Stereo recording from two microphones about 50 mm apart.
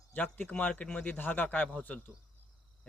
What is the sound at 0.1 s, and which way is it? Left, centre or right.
Speech, left.